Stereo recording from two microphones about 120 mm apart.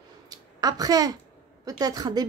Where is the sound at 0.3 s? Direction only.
30° right (ahead or behind).